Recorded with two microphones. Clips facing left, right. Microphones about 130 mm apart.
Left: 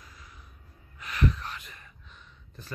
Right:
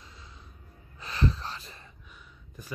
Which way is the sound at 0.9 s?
30° right (ahead or behind).